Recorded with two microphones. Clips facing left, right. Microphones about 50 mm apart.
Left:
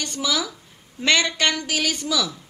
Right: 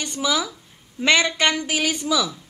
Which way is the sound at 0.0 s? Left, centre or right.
Centre.